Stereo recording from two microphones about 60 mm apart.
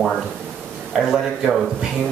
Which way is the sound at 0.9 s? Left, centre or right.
Centre.